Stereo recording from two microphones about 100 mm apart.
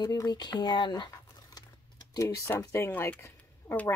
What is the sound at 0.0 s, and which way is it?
Speech, 40° left (ahead or behind).